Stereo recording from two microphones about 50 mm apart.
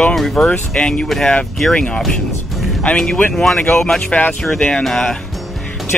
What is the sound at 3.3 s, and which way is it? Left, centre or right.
Speech, centre.